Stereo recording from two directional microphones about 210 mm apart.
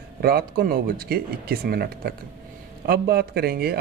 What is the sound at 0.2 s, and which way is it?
Speech, 45° right (ahead or behind).